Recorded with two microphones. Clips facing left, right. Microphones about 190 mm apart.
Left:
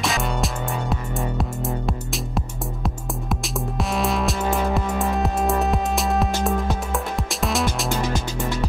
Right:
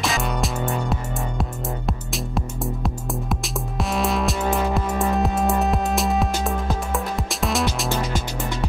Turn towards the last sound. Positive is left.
turn(degrees=0)  # may be behind; listen again after turning